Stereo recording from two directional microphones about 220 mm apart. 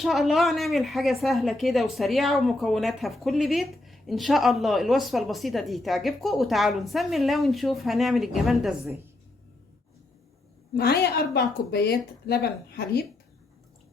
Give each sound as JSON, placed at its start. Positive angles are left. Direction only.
{"t": 0.0, "sound": "speech", "side_deg": 0}
{"t": 10.8, "sound": "a woman's voice", "side_deg": 45}